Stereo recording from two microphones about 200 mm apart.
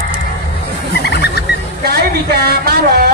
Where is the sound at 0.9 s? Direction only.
55° left (ahead or behind).